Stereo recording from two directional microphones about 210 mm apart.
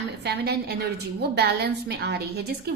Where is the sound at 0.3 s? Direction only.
50° right (ahead or behind).